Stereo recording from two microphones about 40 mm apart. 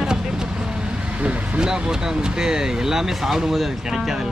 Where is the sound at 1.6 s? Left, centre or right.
Centre.